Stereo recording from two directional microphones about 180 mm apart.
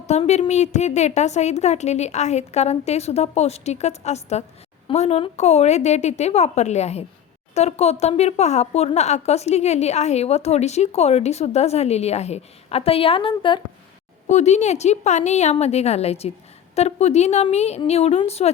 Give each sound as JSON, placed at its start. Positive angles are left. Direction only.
{"t": 0.0, "sound": "speech", "side_deg": 40}
{"t": 14.3, "sound": "speech", "side_deg": 40}